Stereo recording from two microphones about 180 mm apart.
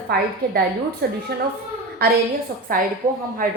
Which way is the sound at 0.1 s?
60° right (ahead or behind).